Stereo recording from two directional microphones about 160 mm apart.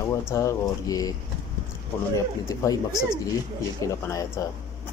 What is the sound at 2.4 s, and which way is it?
Speech, 20° left (ahead or behind).